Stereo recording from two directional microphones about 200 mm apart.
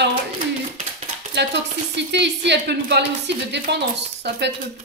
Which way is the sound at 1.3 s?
60° right (ahead or behind).